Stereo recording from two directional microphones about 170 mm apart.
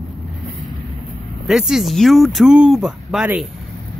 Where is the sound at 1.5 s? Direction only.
5° right (ahead or behind).